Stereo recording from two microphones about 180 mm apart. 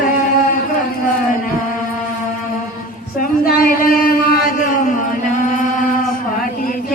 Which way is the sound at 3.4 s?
55° left (ahead or behind).